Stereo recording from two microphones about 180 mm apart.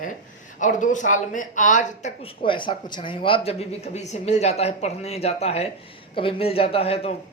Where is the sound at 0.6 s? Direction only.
45° left (ahead or behind).